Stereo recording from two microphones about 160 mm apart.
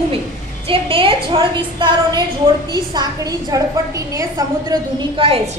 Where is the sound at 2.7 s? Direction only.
25° right (ahead or behind).